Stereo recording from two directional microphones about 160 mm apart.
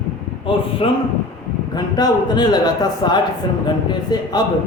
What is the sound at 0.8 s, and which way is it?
A man's voice, 35° left (ahead or behind).